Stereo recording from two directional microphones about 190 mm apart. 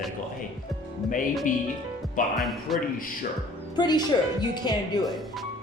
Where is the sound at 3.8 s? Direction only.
20° left (ahead or behind).